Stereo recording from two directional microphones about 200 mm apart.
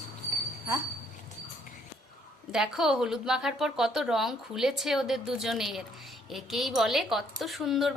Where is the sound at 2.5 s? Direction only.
5° right (ahead or behind).